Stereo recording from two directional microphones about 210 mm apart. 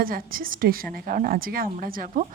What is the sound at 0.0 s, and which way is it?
A woman's voice, 45° right (ahead or behind).